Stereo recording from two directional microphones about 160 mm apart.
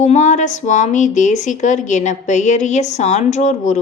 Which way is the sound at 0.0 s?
45° left (ahead or behind).